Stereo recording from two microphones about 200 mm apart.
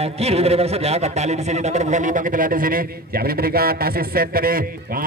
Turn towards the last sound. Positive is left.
turn(degrees=-45)  # may be behind; listen again after turning